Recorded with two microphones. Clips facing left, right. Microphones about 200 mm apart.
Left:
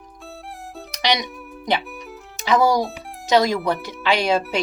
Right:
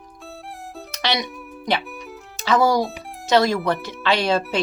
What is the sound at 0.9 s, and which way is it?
Music, 15° left (ahead or behind).